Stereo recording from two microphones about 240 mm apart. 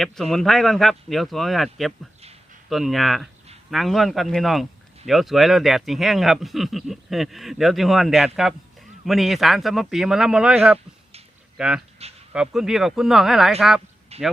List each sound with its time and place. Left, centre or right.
0.0 s speech: centre
14.1 s speech: right